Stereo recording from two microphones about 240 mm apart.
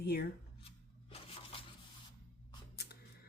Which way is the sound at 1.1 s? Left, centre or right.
Left.